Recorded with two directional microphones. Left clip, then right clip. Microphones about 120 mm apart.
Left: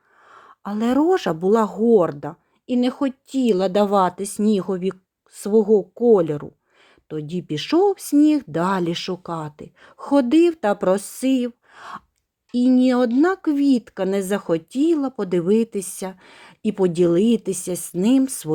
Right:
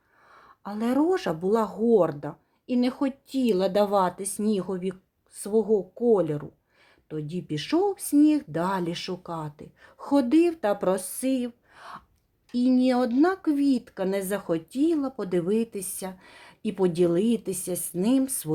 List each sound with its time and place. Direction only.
0.3 s speech: 45° left (ahead or behind)